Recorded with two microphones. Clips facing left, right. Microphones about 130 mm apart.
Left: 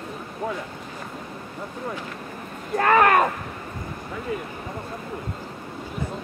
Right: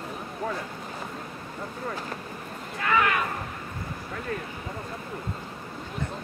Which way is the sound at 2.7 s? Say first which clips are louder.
Left 8 dB; 50° left (ahead or behind).